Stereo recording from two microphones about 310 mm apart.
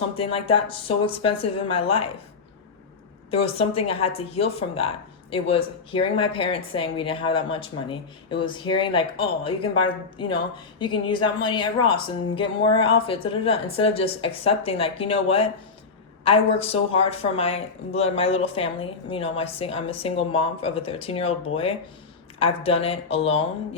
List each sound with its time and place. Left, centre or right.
0.2 s speech: centre
3.2 s speech: centre